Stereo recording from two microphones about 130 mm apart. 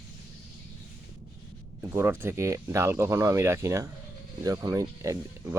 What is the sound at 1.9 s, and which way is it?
Speech, 20° right (ahead or behind).